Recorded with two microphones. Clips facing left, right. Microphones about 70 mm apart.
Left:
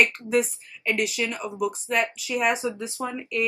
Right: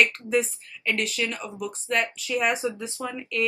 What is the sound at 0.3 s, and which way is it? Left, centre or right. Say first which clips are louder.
Speech: left 1 dB; centre.